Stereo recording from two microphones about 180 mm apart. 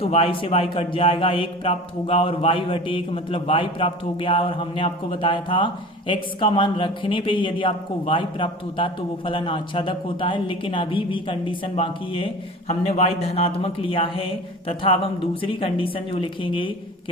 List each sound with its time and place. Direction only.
0.0 s a man's voice: 30° left (ahead or behind)